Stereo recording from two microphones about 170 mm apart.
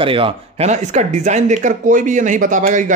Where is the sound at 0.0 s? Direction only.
30° right (ahead or behind).